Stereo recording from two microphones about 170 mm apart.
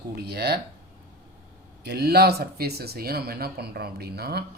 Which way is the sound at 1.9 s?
70° right (ahead or behind).